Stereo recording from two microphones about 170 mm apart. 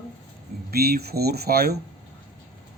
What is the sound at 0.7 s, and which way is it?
Speech, 65° right (ahead or behind).